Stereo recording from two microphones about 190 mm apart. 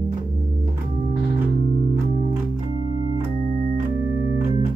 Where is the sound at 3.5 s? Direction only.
45° right (ahead or behind).